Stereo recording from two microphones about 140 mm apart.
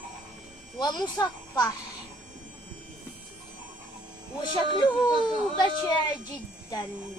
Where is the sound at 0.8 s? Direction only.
30° left (ahead or behind).